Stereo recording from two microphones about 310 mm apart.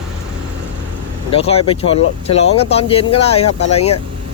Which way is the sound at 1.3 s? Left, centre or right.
Centre.